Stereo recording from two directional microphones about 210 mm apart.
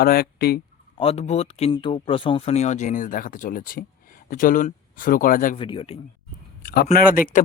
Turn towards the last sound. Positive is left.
turn(degrees=40)  # may be behind; listen again after turning